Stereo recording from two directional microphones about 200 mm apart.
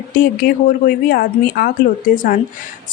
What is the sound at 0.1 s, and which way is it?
A woman's voice, 45° left (ahead or behind).